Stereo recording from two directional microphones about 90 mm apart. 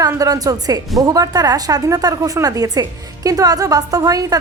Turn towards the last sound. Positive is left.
turn(degrees=-45)  # may be behind; listen again after turning